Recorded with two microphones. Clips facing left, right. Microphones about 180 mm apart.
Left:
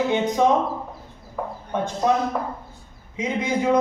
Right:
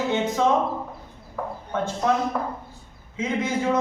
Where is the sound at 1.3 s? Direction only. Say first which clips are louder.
Left 1 dB; 15° left (ahead or behind).